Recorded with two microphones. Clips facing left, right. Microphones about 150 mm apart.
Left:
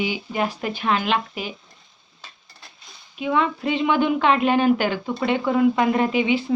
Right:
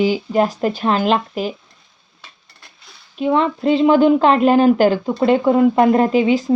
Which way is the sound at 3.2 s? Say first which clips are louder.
Right 5 dB; 35° right (ahead or behind).